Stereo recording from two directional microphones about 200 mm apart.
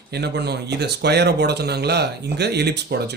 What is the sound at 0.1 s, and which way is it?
Speech, 55° right (ahead or behind).